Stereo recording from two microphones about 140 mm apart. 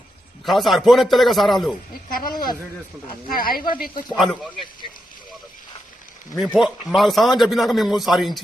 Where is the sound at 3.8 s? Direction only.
90° left.